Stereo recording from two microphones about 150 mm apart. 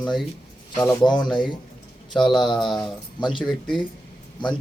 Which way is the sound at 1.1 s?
30° left (ahead or behind).